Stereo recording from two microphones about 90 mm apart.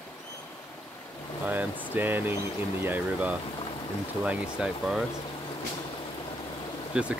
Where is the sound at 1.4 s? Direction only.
20° right (ahead or behind).